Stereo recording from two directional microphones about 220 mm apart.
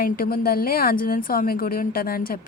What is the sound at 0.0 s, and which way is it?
A woman's voice, 40° left (ahead or behind).